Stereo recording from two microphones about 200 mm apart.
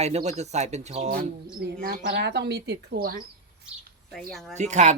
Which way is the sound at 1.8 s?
55° right (ahead or behind).